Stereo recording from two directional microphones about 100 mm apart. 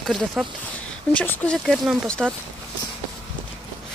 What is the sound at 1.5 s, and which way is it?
Speech, 5° left (ahead or behind).